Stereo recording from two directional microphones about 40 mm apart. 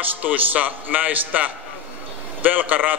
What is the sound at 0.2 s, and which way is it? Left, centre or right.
A man's voice, right.